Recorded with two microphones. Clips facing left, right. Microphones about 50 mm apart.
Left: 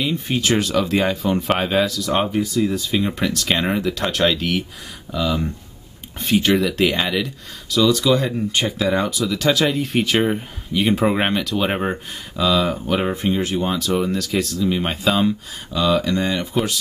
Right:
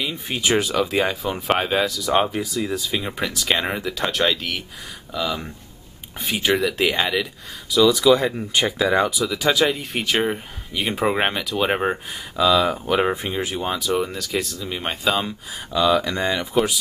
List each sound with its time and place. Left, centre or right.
0.0 s speech: centre
12.8 s speech: centre